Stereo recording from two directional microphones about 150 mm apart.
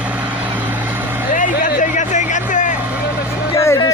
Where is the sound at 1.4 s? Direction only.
60° left (ahead or behind).